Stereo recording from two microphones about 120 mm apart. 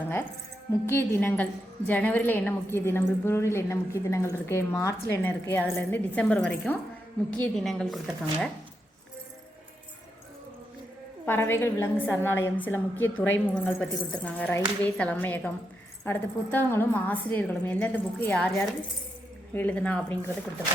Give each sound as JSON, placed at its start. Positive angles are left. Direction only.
{"t": 0.7, "sound": "a woman's voice", "side_deg": 20}
{"t": 7.5, "sound": "speech", "side_deg": 0}
{"t": 11.3, "sound": "a woman's voice", "side_deg": 20}